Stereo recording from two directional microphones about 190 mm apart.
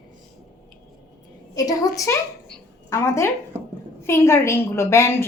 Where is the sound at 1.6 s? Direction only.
20° left (ahead or behind).